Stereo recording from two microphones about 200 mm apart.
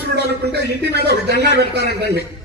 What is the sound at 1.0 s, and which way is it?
Speech, 55° left (ahead or behind).